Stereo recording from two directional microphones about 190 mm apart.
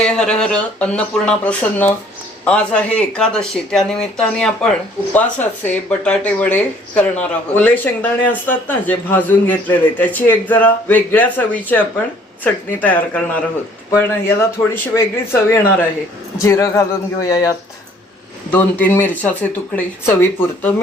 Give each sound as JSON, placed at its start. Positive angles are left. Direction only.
{"t": 0.0, "sound": "speech", "side_deg": 5}
{"t": 18.5, "sound": "speech", "side_deg": 10}